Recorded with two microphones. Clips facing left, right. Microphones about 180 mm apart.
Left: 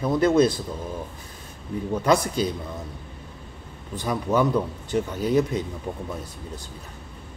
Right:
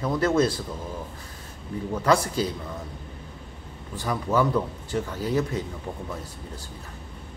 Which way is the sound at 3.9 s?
20° left (ahead or behind).